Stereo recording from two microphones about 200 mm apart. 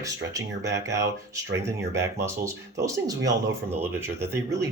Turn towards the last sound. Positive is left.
turn(degrees=-15)  # may be behind; listen again after turning